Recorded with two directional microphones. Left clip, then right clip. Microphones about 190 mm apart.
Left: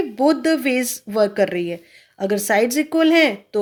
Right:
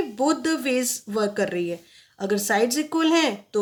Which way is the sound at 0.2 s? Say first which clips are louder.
Left 6 dB; 25° left (ahead or behind).